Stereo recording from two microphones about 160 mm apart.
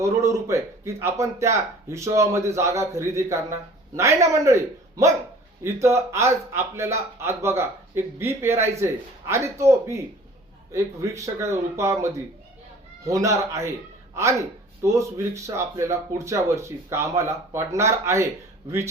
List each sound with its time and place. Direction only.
0.0 s speech: 20° right (ahead or behind)